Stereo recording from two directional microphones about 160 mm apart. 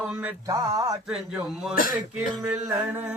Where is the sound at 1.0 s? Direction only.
5° right (ahead or behind).